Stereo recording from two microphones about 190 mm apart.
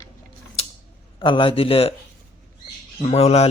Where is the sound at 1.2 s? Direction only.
25° left (ahead or behind).